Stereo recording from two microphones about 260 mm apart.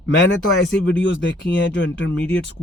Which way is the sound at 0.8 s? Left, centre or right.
Left.